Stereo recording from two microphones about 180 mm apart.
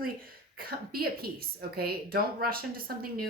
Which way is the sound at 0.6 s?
55° right (ahead or behind).